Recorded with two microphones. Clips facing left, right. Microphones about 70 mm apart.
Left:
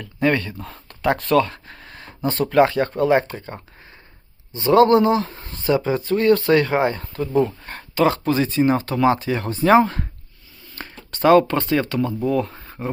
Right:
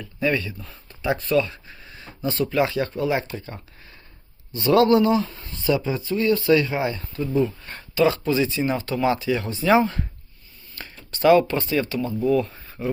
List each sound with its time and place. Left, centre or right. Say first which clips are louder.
0.0 s speech: left 4 dB; left